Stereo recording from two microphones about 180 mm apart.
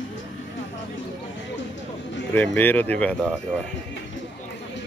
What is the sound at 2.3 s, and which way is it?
Speech, 10° left (ahead or behind).